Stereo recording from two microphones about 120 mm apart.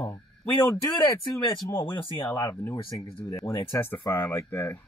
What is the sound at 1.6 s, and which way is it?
Speech, 20° left (ahead or behind).